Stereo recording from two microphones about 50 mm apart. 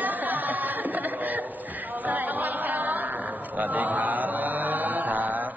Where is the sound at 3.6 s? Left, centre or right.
Right.